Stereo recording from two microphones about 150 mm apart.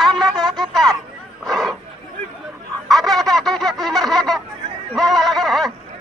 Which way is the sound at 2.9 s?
Centre (ahead or behind).